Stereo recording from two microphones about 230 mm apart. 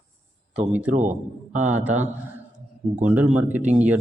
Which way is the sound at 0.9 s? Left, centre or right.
Right.